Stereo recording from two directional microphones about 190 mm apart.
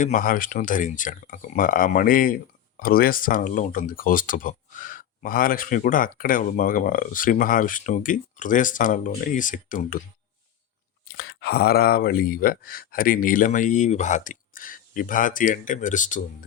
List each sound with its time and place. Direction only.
0.0 s speech: 45° left (ahead or behind)
11.2 s speech: 55° left (ahead or behind)